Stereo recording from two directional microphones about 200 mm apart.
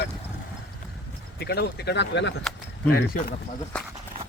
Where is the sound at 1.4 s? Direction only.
55° left (ahead or behind).